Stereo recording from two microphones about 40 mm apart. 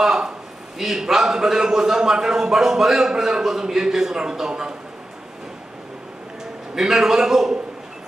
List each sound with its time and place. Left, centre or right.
0.0 s a sound: centre
0.7 s a man's voice: centre
6.7 s a man's voice: centre